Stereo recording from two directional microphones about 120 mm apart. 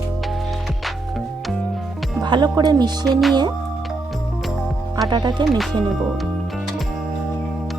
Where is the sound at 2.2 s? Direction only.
35° right (ahead or behind).